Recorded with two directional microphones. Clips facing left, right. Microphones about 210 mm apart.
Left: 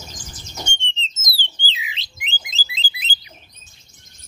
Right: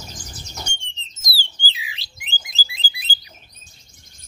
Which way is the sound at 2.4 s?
20° left (ahead or behind).